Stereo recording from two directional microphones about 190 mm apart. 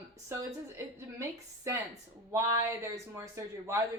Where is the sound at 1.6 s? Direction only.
15° right (ahead or behind).